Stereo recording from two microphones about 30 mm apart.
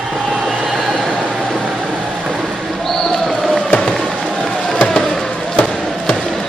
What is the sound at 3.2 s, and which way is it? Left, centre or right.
Basketball bounce, centre.